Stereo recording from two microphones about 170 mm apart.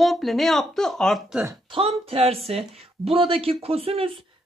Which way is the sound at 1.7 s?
35° right (ahead or behind).